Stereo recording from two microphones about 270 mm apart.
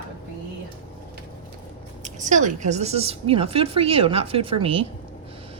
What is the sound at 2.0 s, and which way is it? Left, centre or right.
A woman's voice, right.